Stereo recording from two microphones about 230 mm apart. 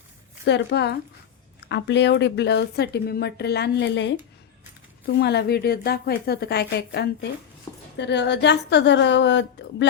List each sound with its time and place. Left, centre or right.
0.4 s speech: left
5.1 s speech: left